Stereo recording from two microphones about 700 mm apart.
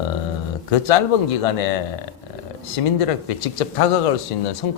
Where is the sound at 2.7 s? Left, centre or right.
Left.